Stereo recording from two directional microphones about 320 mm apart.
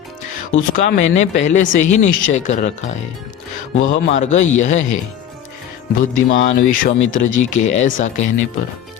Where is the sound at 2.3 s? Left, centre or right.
Left.